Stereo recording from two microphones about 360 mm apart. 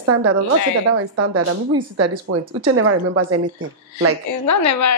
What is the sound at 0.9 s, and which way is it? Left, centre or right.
Speech, right.